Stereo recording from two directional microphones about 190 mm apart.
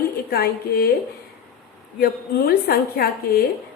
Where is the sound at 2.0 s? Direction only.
55° left (ahead or behind).